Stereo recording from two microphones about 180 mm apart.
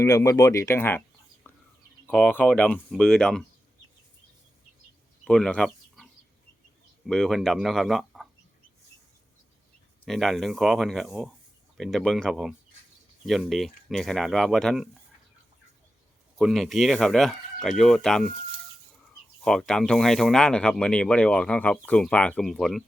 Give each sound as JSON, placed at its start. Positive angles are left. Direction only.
{"t": 0.0, "sound": "speech", "side_deg": 15}
{"t": 1.5, "sound": "a sound", "side_deg": 10}
{"t": 2.0, "sound": "speech", "side_deg": 10}
{"t": 5.2, "sound": "a sound", "side_deg": 5}
{"t": 7.1, "sound": "speech", "side_deg": 0}
{"t": 10.1, "sound": "speech", "side_deg": 0}
{"t": 16.4, "sound": "speech", "side_deg": 0}
{"t": 19.5, "sound": "speech", "side_deg": 5}